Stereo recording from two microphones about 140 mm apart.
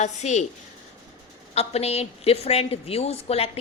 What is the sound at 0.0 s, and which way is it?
Speech, 55° left (ahead or behind).